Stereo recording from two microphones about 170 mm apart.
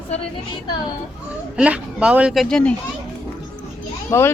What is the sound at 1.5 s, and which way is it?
Speech, 5° right (ahead or behind).